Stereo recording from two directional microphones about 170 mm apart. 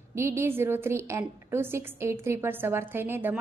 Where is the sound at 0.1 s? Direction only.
15° right (ahead or behind).